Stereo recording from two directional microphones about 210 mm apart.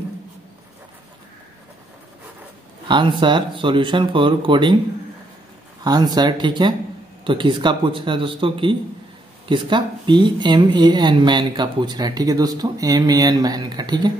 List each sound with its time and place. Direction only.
2.9 s speech: 20° right (ahead or behind)
5.9 s speech: 20° right (ahead or behind)